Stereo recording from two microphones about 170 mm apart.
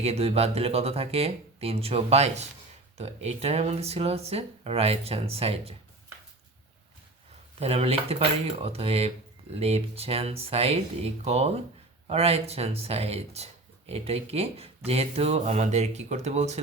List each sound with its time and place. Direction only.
0.0 s speech: 40° right (ahead or behind)
7.6 s speech: 35° right (ahead or behind)